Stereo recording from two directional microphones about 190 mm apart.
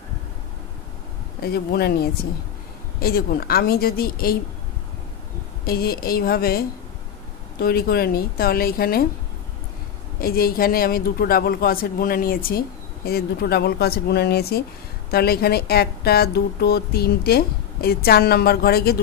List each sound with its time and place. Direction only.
1.4 s a man's voice: 55° left (ahead or behind)
5.7 s a man's voice: 50° left (ahead or behind)
10.2 s a man's voice: 50° left (ahead or behind)